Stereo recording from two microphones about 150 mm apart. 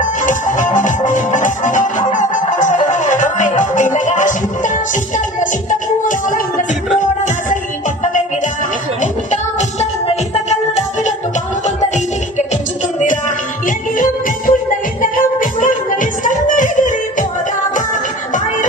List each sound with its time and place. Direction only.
0.2 s music: 60° left (ahead or behind)
9.0 s music: 55° left (ahead or behind)
10.3 s music: 45° left (ahead or behind)
13.0 s music: 55° left (ahead or behind)